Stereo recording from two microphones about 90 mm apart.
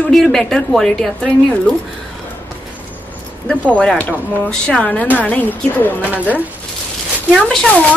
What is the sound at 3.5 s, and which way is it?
A woman's voice, 10° left (ahead or behind).